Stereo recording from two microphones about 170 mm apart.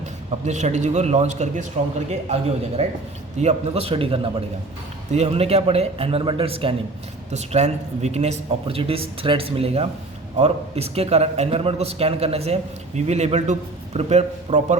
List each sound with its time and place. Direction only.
0.4 s a man's voice: 45° right (ahead or behind)